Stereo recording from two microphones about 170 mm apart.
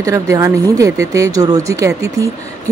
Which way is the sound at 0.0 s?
20° right (ahead or behind).